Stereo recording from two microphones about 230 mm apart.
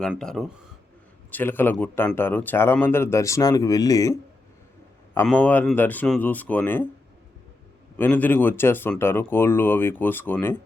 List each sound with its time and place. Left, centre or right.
0.0 s speech: centre
7.9 s speech: centre